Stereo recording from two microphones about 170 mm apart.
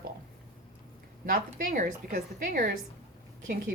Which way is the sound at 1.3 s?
50° right (ahead or behind).